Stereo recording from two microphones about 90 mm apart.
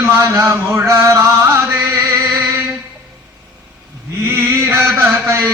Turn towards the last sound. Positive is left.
turn(degrees=-25)  # may be behind; listen again after turning